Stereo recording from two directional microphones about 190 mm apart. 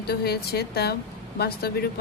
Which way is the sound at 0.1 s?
55° left (ahead or behind).